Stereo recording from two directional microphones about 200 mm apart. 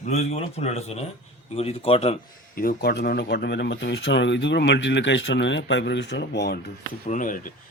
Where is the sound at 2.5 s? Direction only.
45° left (ahead or behind).